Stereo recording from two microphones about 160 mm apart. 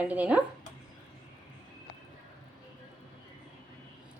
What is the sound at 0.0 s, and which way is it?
Speech, 10° right (ahead or behind).